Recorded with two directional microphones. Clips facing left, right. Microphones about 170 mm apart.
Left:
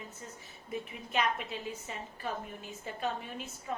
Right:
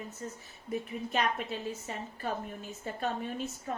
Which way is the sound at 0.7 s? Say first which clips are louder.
Right 4 dB; 40° right (ahead or behind).